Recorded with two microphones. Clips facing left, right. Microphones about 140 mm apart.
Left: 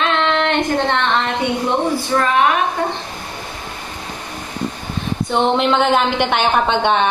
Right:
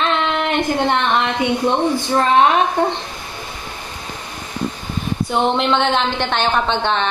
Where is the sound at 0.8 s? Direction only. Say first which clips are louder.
Right 1 dB; 15° right (ahead or behind).